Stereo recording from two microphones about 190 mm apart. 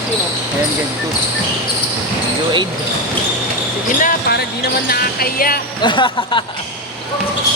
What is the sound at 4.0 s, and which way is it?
Speech, 50° left (ahead or behind).